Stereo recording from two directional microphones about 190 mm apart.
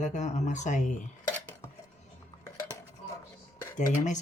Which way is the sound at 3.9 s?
40° left (ahead or behind).